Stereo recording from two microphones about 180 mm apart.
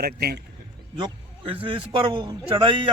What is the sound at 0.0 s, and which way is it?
Speech, 60° right (ahead or behind).